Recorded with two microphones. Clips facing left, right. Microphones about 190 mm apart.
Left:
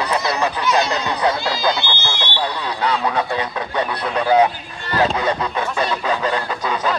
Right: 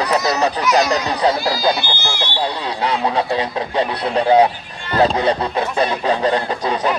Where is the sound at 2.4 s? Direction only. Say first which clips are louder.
Right 1 dB; 30° right (ahead or behind).